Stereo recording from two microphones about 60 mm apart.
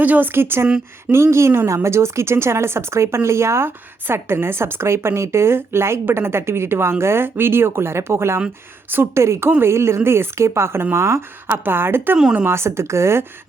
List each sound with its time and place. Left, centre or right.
0.0 s a woman's voice: right
11.4 s a woman's voice: right